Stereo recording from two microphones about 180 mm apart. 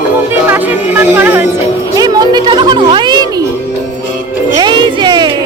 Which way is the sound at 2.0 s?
20° right (ahead or behind).